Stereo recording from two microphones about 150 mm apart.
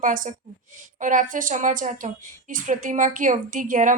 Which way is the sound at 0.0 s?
60° right (ahead or behind).